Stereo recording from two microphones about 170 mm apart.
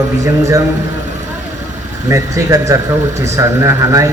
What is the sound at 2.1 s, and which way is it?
A man's voice, 20° right (ahead or behind).